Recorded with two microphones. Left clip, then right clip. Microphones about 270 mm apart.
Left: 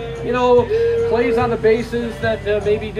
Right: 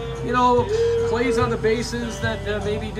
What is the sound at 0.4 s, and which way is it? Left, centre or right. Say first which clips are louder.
Music: left 4 dB; centre.